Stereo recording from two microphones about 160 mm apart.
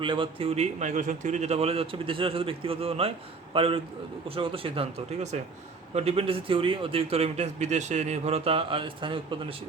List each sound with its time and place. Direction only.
0.0 s a man's voice: 30° right (ahead or behind)